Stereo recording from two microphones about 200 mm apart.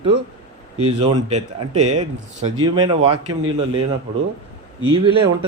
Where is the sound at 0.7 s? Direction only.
30° right (ahead or behind).